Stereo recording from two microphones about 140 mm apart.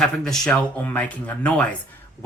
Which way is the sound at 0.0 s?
5° left (ahead or behind).